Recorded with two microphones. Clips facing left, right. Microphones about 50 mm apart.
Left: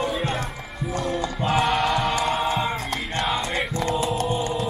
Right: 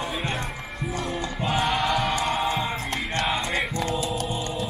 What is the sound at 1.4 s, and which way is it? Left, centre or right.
Choir, centre.